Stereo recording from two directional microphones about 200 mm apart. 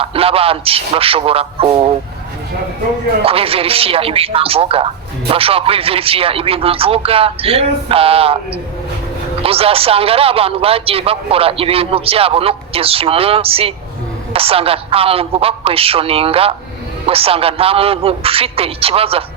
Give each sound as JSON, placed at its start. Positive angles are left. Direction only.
{"t": 0.0, "sound": "a man's voice", "side_deg": -30}
{"t": 3.2, "sound": "a man's voice", "side_deg": -30}
{"t": 9.4, "sound": "a man's voice", "side_deg": -30}